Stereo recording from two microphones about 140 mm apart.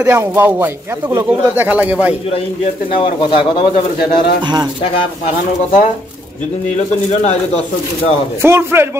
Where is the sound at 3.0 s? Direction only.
35° left (ahead or behind).